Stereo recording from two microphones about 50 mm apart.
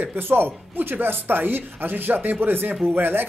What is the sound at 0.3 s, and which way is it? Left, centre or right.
Speech, right.